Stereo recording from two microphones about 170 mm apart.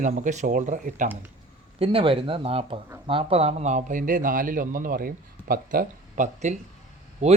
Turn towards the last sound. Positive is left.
turn(degrees=-40)  # may be behind; listen again after turning